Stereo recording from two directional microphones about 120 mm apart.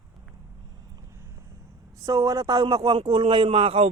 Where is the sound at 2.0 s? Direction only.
30° right (ahead or behind); by 3.8 s 50° right (ahead or behind).